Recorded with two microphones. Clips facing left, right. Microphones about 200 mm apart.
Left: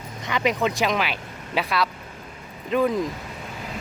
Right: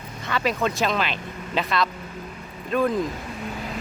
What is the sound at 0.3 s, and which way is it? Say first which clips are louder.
Speech: left 1 dB; 15° left (ahead or behind).